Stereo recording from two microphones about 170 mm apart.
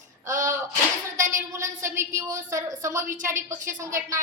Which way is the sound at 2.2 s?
20° right (ahead or behind).